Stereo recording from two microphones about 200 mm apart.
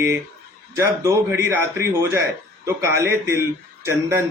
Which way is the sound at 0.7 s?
15° right (ahead or behind).